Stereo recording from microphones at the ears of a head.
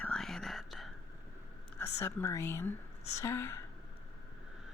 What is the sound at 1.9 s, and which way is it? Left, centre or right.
Speech, left.